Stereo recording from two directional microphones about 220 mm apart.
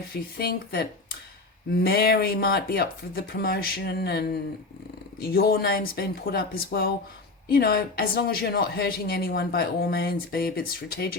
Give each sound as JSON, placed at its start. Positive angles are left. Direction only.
{"t": 0.1, "sound": "speech", "side_deg": 45}
{"t": 5.3, "sound": "speech", "side_deg": 45}